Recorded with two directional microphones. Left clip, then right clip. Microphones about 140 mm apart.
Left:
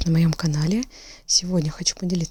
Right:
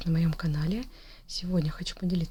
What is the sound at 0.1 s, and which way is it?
Speech, 60° left (ahead or behind).